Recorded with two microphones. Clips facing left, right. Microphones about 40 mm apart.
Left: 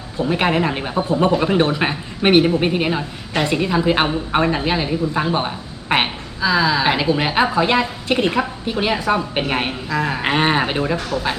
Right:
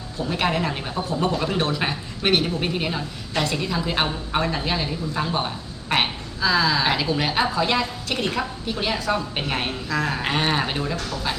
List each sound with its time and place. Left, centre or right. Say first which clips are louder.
0.2 s speech: left 5 dB; left